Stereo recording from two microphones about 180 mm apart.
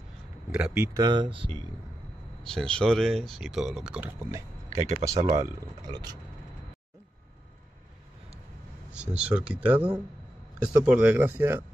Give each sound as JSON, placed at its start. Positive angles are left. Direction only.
{"t": 0.5, "sound": "speech", "side_deg": -5}
{"t": 0.8, "sound": "speech", "side_deg": -20}
{"t": 2.4, "sound": "speech", "side_deg": 5}
{"t": 4.9, "sound": "speech", "side_deg": -20}
{"t": 8.9, "sound": "speech", "side_deg": -5}